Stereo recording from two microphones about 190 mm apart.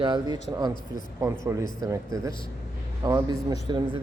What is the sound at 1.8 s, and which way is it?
Speech, 15° right (ahead or behind).